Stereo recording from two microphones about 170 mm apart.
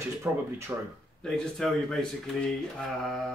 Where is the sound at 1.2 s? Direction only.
5° left (ahead or behind).